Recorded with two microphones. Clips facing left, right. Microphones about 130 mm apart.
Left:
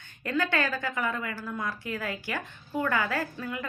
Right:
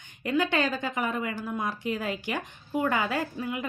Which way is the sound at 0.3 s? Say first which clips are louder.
Right 2 dB; 15° right (ahead or behind).